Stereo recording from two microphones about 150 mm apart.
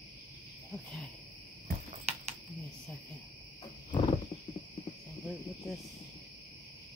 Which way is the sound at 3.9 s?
40° left (ahead or behind).